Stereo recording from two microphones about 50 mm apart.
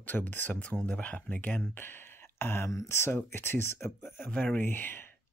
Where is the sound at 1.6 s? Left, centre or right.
Left.